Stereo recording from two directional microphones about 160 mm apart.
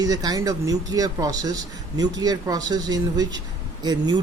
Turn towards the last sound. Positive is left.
turn(degrees=-25)  # may be behind; listen again after turning